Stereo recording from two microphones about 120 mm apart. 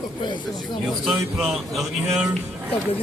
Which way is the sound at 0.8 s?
Centre (ahead or behind).